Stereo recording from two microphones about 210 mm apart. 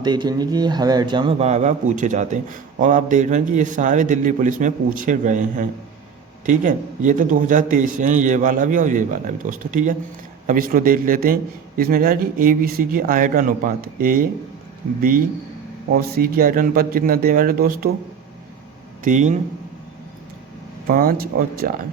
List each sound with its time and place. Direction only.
0.0 s a man's voice: 20° right (ahead or behind); by 14.3 s 40° right (ahead or behind)
16.0 s speech: 45° right (ahead or behind)
19.0 s a man's voice: 35° right (ahead or behind)
20.8 s speech: 40° right (ahead or behind)